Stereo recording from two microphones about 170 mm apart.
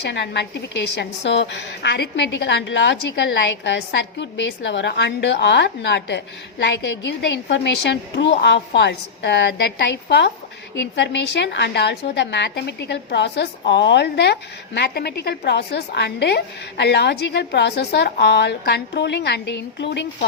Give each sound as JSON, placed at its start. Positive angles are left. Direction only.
{"t": 0.0, "sound": "a woman's voice", "side_deg": 90}